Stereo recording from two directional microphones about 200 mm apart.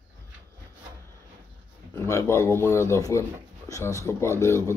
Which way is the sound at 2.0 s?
15° left (ahead or behind).